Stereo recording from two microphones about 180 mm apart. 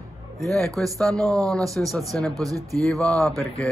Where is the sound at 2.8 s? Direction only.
5° left (ahead or behind).